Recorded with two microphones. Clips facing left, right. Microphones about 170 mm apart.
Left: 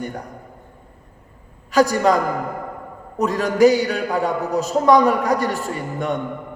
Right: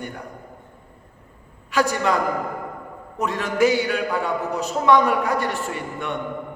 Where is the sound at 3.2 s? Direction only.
40° left (ahead or behind).